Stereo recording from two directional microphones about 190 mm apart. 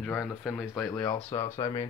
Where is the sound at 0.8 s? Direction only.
15° left (ahead or behind).